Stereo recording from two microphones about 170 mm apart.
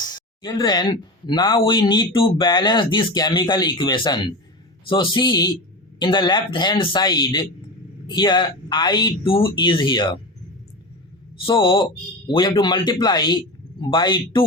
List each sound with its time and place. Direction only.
0.0 s speech: 25° left (ahead or behind)
11.4 s speech: 30° left (ahead or behind)